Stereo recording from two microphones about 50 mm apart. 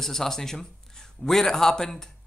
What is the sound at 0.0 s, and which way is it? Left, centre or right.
A man's voice, centre.